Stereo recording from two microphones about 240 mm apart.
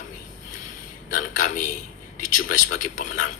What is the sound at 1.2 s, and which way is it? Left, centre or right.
Speech, left.